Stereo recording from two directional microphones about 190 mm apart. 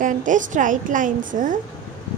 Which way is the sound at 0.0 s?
45° right (ahead or behind).